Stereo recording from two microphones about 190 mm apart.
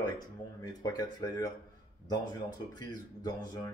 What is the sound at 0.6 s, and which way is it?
Speech, 20° left (ahead or behind).